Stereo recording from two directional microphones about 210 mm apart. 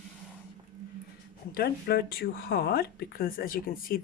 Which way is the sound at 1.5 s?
45° left (ahead or behind).